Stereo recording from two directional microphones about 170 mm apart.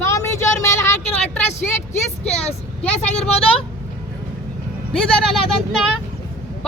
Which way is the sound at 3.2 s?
35° left (ahead or behind).